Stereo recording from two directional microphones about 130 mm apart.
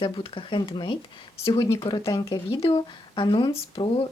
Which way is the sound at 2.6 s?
45° left (ahead or behind).